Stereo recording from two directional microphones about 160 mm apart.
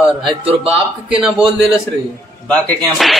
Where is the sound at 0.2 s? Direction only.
30° right (ahead or behind).